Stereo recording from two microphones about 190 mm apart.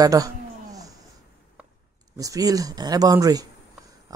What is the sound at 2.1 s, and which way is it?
Speech, 20° right (ahead or behind).